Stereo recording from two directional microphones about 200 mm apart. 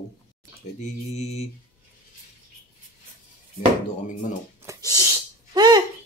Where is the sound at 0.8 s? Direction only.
35° left (ahead or behind).